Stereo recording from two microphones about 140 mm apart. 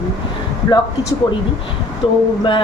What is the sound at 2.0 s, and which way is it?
Speech, 40° left (ahead or behind).